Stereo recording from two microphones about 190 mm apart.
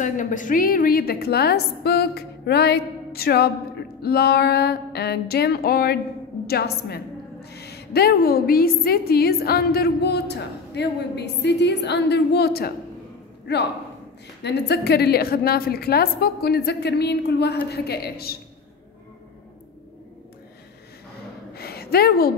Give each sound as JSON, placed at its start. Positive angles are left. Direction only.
{"t": 0.0, "sound": "a woman's voice", "side_deg": 45}
{"t": 14.4, "sound": "a woman's voice", "side_deg": 60}
{"t": 21.5, "sound": "a sound", "side_deg": 55}